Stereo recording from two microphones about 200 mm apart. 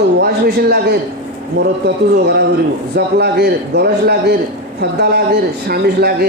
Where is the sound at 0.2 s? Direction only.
55° right (ahead or behind).